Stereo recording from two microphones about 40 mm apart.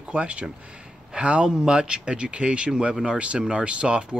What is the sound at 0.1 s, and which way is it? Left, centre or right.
Speech, right.